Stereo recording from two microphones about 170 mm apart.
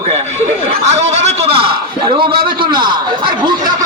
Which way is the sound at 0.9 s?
40° right (ahead or behind).